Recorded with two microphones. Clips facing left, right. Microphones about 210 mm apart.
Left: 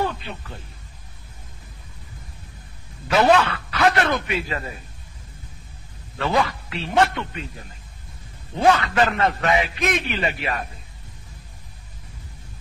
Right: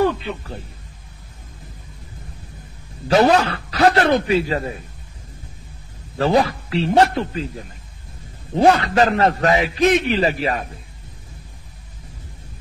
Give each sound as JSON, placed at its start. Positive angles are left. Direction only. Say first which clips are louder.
{"t": 3.1, "sound": "a man's voice", "louder": "right 3 dB", "side_deg": -35}
{"t": 6.1, "sound": "a man's voice", "louder": "right 5 dB", "side_deg": -35}
{"t": 8.5, "sound": "a man's voice", "louder": "right 4 dB", "side_deg": -35}